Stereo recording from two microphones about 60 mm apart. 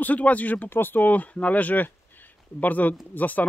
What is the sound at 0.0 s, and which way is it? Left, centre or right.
Speech, left.